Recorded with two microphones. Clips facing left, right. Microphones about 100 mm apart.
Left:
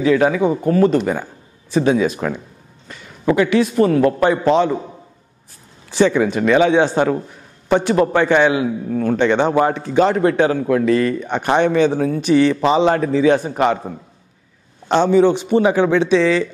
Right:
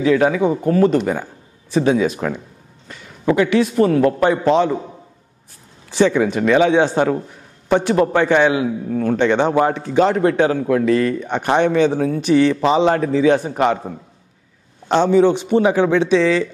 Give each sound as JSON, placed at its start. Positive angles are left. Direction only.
{"t": 0.0, "sound": "a man's voice", "side_deg": 15}
{"t": 5.9, "sound": "a man's voice", "side_deg": 15}